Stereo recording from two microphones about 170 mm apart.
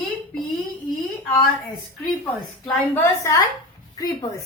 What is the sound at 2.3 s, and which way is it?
A woman's voice, 10° left (ahead or behind).